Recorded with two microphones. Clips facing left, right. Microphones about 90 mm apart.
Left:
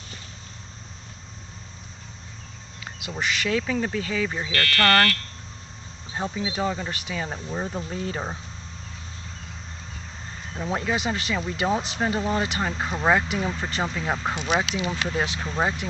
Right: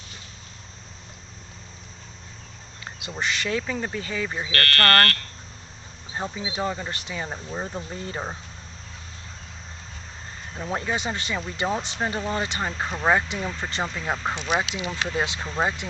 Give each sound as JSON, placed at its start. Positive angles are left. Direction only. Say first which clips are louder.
{"t": 2.8, "sound": "speech", "louder": "even", "side_deg": 0}
{"t": 4.5, "sound": "speech", "louder": "even", "side_deg": -45}
{"t": 6.1, "sound": "speech", "louder": "left 2 dB", "side_deg": 0}
{"t": 10.5, "sound": "speech", "louder": "left 1 dB", "side_deg": 0}